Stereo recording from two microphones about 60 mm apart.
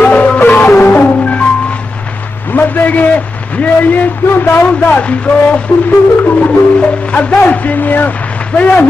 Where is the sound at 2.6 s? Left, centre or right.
Left.